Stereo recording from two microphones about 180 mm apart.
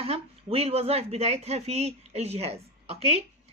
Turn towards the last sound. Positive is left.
turn(degrees=-35)  # may be behind; listen again after turning